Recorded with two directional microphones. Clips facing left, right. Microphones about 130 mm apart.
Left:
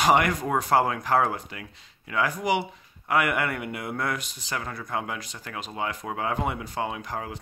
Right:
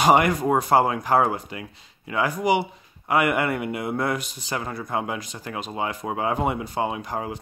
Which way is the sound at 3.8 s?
25° right (ahead or behind).